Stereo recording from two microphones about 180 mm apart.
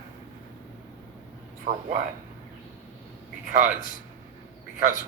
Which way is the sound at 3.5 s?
45° right (ahead or behind).